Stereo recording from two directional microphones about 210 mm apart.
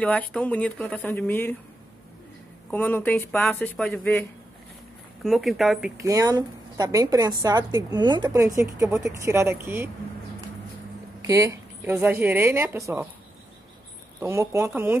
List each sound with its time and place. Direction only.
0.0 s speech: 5° left (ahead or behind)
2.7 s speech: 10° left (ahead or behind)
6.0 s a woman's voice: 15° right (ahead or behind)
11.2 s a woman's voice: 15° right (ahead or behind)
14.2 s a woman's voice: 10° right (ahead or behind)